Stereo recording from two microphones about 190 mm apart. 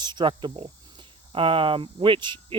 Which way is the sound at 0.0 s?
25° right (ahead or behind).